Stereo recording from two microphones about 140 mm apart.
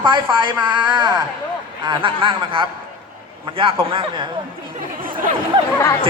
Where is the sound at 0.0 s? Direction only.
35° right (ahead or behind).